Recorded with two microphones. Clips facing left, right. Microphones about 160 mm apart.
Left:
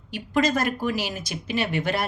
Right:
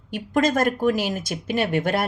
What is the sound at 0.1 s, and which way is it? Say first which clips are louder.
Speech: right 2 dB; 50° right (ahead or behind).